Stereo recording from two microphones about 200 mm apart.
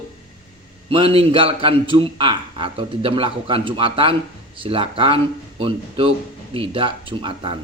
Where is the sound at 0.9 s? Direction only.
30° right (ahead or behind).